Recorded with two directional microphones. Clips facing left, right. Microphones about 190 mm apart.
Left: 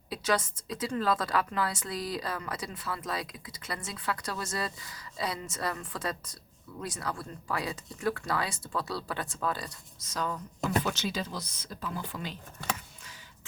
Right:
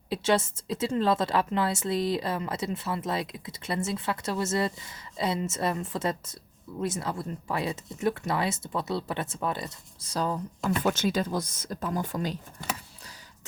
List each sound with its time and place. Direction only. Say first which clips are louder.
0.1 s a woman's voice: right 5 dB; 25° right (ahead or behind)
10.8 s speech: right 7 dB; 50° right (ahead or behind)